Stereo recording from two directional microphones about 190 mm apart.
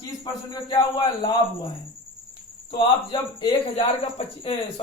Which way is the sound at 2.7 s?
25° left (ahead or behind).